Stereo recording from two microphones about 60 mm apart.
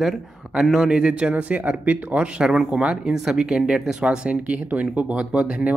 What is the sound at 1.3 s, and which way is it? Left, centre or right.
Speech, right.